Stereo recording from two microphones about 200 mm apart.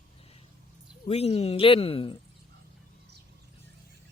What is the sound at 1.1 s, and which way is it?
Speech, 30° left (ahead or behind).